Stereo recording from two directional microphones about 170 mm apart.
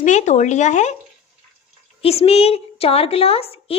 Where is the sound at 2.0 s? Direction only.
35° left (ahead or behind).